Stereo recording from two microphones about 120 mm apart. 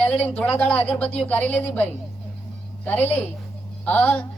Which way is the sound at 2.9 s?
15° left (ahead or behind).